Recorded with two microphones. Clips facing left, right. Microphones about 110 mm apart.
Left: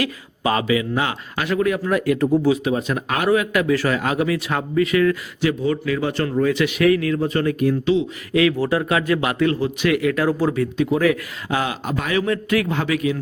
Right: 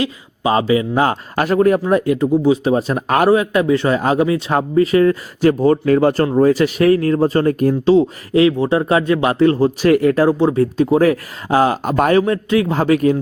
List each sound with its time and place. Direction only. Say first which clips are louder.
0.0 s speech: right 3 dB; 30° right (ahead or behind)
1.9 s speech: right 4 dB; 25° right (ahead or behind)
2.6 s speech: right 5 dB; 35° right (ahead or behind)
3.3 s speech: right 4 dB; 30° right (ahead or behind)
5.5 s speech: right 8 dB; 45° right (ahead or behind)
12.2 s speech: right 4 dB; 25° right (ahead or behind)